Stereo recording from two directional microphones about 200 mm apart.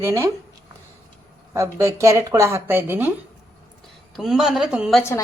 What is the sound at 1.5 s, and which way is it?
Speech, 15° right (ahead or behind).